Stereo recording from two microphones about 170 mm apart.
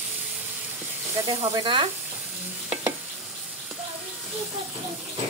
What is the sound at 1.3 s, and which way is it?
Sizzle, 30° right (ahead or behind).